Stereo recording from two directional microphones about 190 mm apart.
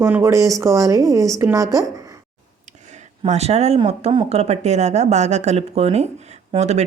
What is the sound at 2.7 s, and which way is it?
Speech, 40° right (ahead or behind).